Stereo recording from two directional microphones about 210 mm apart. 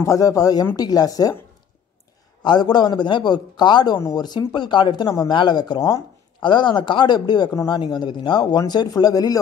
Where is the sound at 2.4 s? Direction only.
20° left (ahead or behind).